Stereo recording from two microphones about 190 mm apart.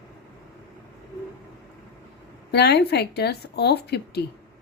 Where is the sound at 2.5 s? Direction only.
60° left (ahead or behind).